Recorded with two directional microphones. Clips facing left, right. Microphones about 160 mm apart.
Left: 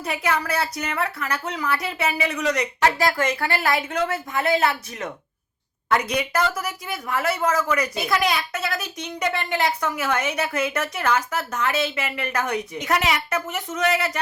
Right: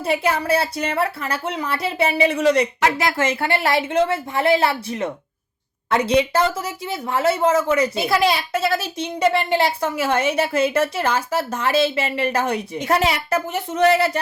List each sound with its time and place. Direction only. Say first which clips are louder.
0.0 s a woman's voice: right 4 dB; 30° right (ahead or behind)